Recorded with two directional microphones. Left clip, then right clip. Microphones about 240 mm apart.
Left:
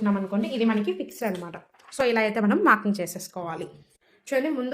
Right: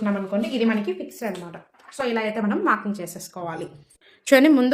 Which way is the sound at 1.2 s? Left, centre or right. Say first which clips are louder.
Left 1 dB; left.